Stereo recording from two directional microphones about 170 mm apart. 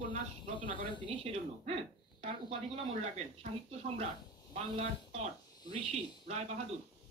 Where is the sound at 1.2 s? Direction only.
35° right (ahead or behind).